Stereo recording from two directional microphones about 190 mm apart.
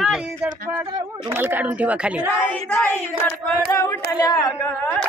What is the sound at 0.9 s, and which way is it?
Speech, 20° right (ahead or behind).